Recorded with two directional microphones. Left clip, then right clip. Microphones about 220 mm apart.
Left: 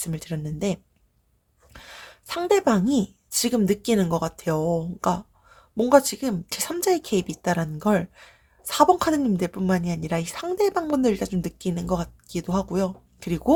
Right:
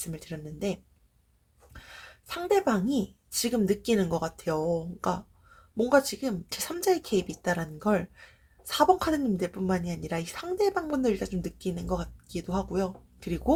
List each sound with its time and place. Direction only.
0.0 s a woman's voice: 35° left (ahead or behind)